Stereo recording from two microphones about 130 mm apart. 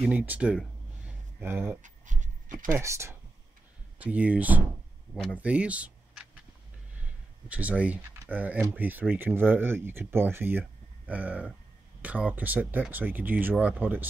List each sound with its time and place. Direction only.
0.1 s speech: 10° right (ahead or behind)
1.0 s a sound: 15° right (ahead or behind)
1.8 s a sound: 75° right (ahead or behind)
2.7 s speech: 20° right (ahead or behind)
4.0 s speech: 10° right (ahead or behind)
7.4 s speech: 10° right (ahead or behind)